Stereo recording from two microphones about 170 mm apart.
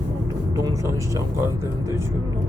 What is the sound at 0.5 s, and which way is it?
Speech, 20° right (ahead or behind).